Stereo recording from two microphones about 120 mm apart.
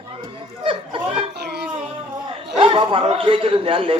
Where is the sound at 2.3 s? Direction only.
50° right (ahead or behind).